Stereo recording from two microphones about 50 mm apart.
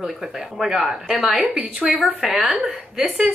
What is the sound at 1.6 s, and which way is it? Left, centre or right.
Speech, right.